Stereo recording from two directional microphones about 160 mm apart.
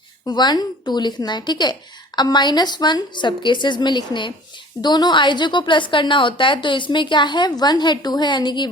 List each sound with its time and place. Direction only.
0.3 s a woman's voice: 25° left (ahead or behind)